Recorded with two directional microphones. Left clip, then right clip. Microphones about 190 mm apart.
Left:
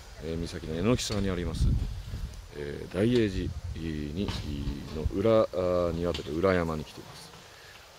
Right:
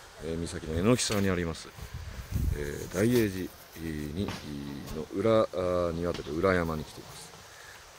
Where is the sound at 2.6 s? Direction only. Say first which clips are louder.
Even; 15° left (ahead or behind).